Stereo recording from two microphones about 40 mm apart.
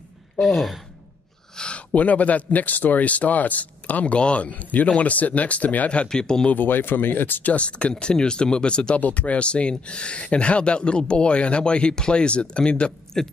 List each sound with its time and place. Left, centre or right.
0.4 s speech: centre
1.6 s a sound: left
2.0 s speech: left
6.0 s speech: centre
6.5 s speech: left
7.5 s speech: left
9.0 s speech: left
13.2 s speech: centre